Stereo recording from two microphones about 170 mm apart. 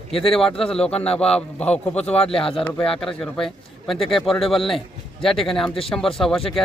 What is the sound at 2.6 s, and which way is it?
Speech, 5° left (ahead or behind).